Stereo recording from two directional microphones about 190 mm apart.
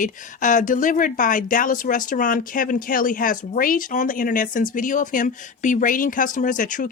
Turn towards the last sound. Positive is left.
turn(degrees=45)  # may be behind; listen again after turning